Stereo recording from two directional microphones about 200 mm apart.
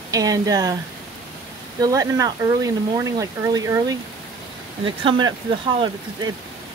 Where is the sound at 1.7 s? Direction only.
15° right (ahead or behind).